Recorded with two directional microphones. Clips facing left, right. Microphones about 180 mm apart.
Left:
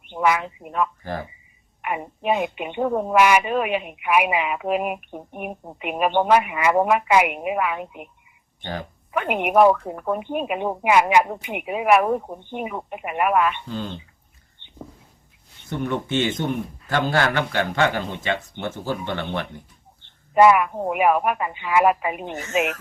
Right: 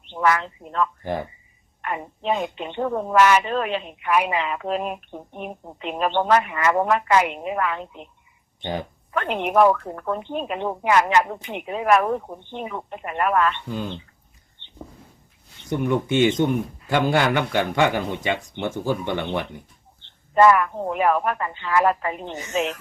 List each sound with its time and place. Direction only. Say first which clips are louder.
0.0 s a woman's voice: even; 10° left (ahead or behind)
8.6 s speech: right 3 dB; 20° right (ahead or behind)
9.1 s a woman's voice: left 1 dB; 10° left (ahead or behind)
14.6 s a sound: left 1 dB; 15° left (ahead or behind)
15.7 s speech: right 3 dB; 15° right (ahead or behind)
20.0 s a woman's voice: left 1 dB; 10° left (ahead or behind)